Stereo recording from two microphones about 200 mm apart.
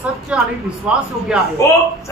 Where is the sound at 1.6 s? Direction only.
15° left (ahead or behind).